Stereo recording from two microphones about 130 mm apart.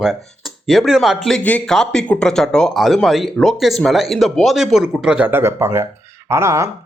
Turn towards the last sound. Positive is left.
turn(degrees=-20)  # may be behind; listen again after turning